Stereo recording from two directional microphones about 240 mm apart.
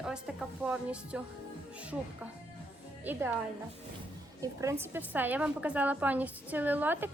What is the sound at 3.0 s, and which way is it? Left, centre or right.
Speech, centre.